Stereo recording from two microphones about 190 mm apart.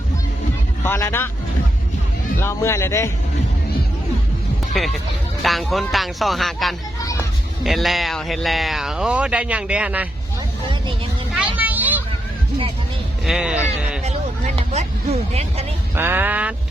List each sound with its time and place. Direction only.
0.9 s speech: 10° left (ahead or behind)
2.4 s speech: 15° left (ahead or behind)
4.7 s speech: centre (ahead or behind)
11.3 s children playing: 5° right (ahead or behind)
13.2 s speech: 5° right (ahead or behind)
14.0 s a sound: 35° right (ahead or behind)
16.0 s speech: 10° right (ahead or behind)